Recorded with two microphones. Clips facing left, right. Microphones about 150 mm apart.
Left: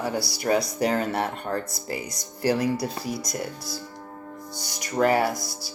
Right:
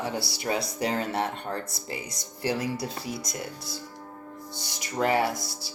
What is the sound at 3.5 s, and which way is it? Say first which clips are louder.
Speech: left 3 dB; 25° right (ahead or behind).